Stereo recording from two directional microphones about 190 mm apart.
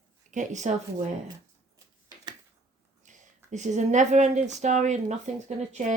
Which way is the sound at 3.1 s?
40° right (ahead or behind).